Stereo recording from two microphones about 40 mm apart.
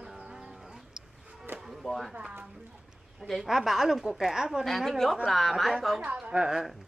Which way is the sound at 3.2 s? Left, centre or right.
Centre.